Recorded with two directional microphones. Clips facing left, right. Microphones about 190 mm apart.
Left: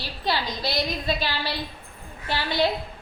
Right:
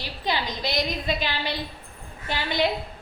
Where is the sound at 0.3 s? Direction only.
20° right (ahead or behind).